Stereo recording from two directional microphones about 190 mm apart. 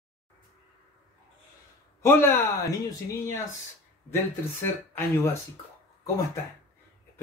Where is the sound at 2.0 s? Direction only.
10° left (ahead or behind).